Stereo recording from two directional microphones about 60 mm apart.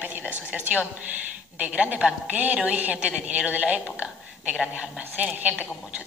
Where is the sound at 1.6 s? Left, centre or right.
Right.